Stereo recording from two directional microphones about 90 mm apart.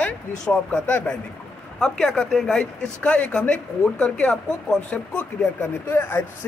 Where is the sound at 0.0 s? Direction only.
15° left (ahead or behind).